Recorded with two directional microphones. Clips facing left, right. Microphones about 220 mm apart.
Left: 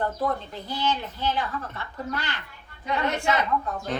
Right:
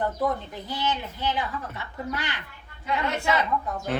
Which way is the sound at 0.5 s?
15° right (ahead or behind).